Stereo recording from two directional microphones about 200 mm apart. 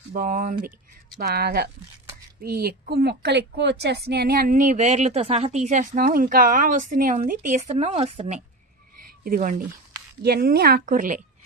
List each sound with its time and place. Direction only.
0.1 s a woman's voice: 40° right (ahead or behind)